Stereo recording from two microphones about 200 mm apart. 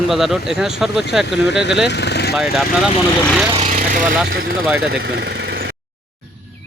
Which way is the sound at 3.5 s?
35° right (ahead or behind).